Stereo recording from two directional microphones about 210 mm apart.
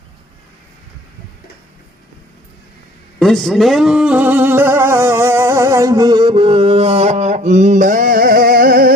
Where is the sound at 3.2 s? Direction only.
Centre (ahead or behind).